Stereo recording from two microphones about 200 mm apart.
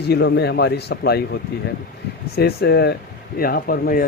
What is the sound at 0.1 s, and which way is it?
A man's voice, 55° left (ahead or behind).